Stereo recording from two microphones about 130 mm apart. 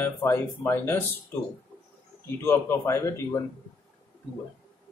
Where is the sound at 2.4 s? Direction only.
20° left (ahead or behind).